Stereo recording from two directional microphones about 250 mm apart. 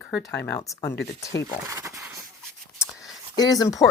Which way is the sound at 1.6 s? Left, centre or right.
Centre.